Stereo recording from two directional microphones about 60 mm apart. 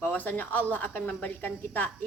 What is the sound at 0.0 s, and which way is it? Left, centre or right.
A woman's voice, left.